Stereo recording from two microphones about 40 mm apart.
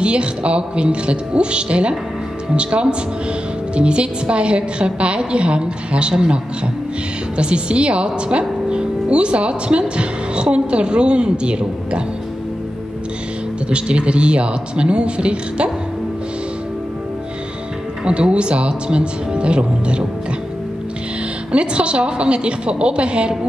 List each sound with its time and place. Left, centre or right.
0.0 s speech: right
13.7 s speech: right
18.0 s speech: right
21.5 s speech: right